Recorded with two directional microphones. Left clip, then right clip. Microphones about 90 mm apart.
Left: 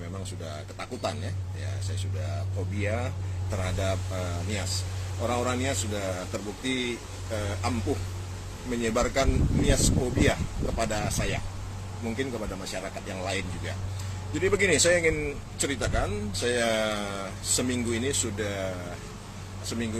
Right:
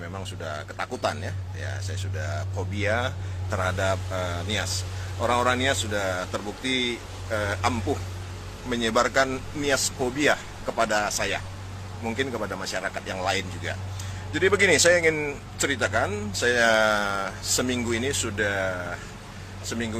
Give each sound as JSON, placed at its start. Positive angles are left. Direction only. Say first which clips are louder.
{"t": 0.4, "sound": "speech", "louder": "right 8 dB", "side_deg": 30}
{"t": 2.8, "sound": "speech", "louder": "right 7 dB", "side_deg": 25}
{"t": 8.7, "sound": "speech", "louder": "right 4 dB", "side_deg": 30}